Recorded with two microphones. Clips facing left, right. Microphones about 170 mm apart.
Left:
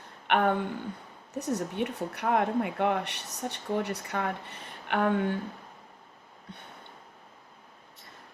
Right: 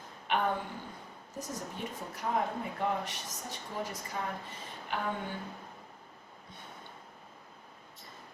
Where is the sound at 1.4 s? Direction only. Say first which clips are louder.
Left 10 dB; 70° left (ahead or behind).